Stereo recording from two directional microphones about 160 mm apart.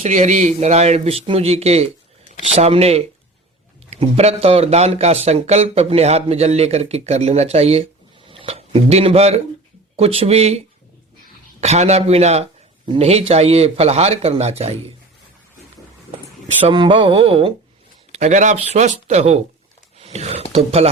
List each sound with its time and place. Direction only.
0.0 s speech: 50° right (ahead or behind)
11.6 s speech: 45° right (ahead or behind)
16.6 s speech: 30° right (ahead or behind)
18.1 s speech: 45° right (ahead or behind)